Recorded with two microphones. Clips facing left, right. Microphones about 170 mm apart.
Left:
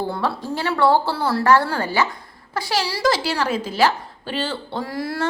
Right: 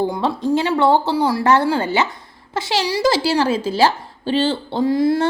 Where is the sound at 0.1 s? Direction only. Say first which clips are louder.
Right 6 dB; 20° right (ahead or behind).